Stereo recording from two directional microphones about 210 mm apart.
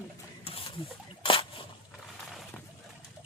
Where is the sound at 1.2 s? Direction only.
25° left (ahead or behind).